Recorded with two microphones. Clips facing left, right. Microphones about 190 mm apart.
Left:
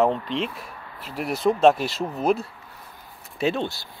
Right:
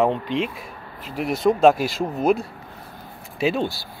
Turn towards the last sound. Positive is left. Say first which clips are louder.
# right 2 dB
turn(degrees=-10)  # may be behind; listen again after turning